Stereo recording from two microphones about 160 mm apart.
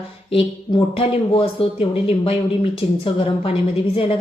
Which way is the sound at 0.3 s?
35° left (ahead or behind).